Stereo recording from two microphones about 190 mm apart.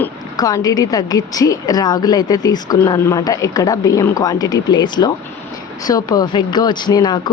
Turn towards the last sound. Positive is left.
turn(degrees=20)  # may be behind; listen again after turning